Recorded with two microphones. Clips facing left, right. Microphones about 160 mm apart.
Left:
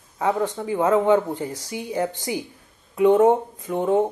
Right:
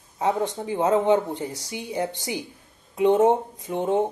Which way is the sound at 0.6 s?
25° right (ahead or behind).